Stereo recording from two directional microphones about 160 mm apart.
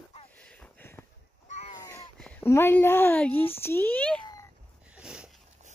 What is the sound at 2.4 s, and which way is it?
Speech, 15° left (ahead or behind).